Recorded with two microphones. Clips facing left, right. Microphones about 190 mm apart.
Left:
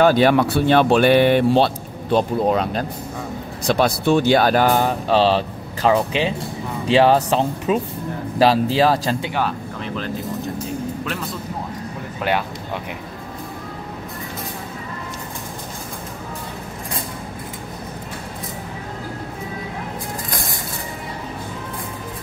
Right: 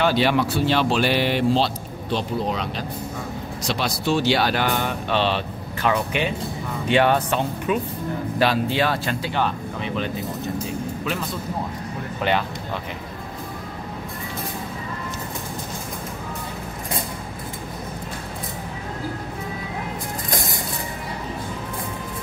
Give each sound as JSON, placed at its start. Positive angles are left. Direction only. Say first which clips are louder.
{"t": 0.0, "sound": "speech", "louder": "left 5 dB", "side_deg": 50}
{"t": 9.3, "sound": "speech", "louder": "left 1 dB", "side_deg": 0}
{"t": 12.2, "sound": "speech", "louder": "left 1 dB", "side_deg": 5}